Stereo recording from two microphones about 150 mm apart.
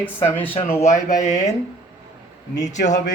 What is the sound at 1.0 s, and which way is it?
Speech, 55° left (ahead or behind).